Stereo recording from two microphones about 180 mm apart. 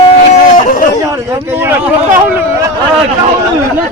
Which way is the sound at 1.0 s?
15° right (ahead or behind).